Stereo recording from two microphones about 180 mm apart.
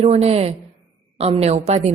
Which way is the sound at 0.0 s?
35° right (ahead or behind).